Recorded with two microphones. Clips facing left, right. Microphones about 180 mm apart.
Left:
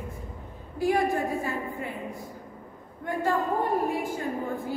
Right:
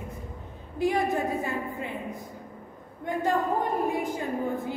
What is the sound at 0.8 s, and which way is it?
Speech, 20° right (ahead or behind).